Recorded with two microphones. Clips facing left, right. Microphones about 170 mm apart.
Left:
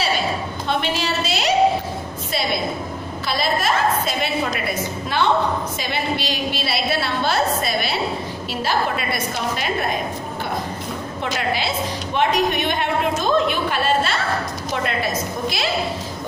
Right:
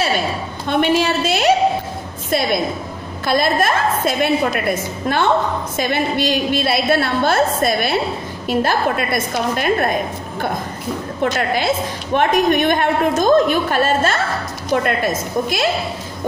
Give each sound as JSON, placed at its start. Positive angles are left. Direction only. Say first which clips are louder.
{"t": 0.7, "sound": "a sound", "louder": "right 7 dB", "side_deg": -50}
{"t": 3.3, "sound": "a woman's voice", "louder": "right 5 dB", "side_deg": -50}
{"t": 11.2, "sound": "a woman's voice", "louder": "right 6 dB", "side_deg": -50}